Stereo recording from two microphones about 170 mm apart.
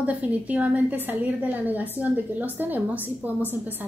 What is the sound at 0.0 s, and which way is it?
A woman's voice, 10° right (ahead or behind).